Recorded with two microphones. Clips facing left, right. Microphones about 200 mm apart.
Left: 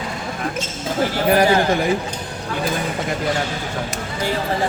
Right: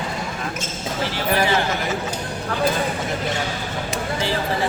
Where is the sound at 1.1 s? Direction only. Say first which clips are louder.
Left 6 dB; 45° left (ahead or behind).